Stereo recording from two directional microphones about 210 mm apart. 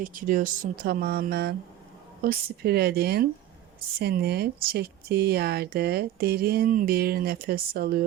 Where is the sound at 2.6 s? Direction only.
50° right (ahead or behind).